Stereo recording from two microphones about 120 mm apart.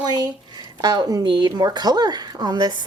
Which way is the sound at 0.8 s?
35° right (ahead or behind).